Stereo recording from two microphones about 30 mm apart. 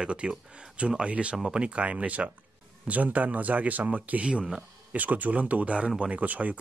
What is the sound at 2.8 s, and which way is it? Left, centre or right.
Speech, right.